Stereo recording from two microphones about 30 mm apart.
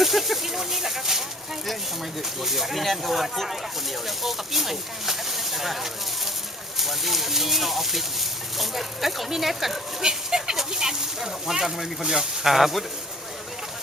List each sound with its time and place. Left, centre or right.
0.0 s speech: centre
2.4 s speech: centre
10.0 s goat: right
10.7 s speech: centre